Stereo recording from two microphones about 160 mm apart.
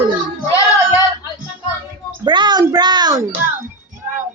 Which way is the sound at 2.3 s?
30° right (ahead or behind).